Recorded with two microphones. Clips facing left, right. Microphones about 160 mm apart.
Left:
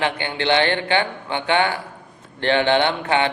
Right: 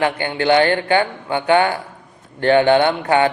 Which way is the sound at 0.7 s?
40° right (ahead or behind).